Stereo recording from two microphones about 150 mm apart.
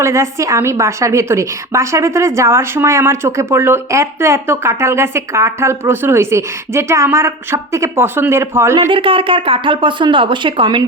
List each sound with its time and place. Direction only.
0.0 s a woman's voice: 20° right (ahead or behind)
8.9 s speech: 35° right (ahead or behind)